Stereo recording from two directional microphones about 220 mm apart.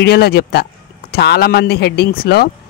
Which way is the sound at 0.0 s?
45° left (ahead or behind).